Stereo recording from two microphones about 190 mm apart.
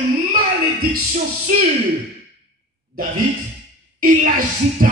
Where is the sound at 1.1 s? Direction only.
40° right (ahead or behind).